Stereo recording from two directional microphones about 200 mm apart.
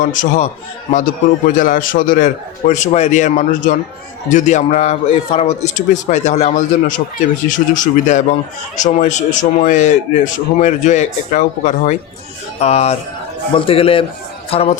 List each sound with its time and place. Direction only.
0.0 s a man's voice: 40° left (ahead or behind)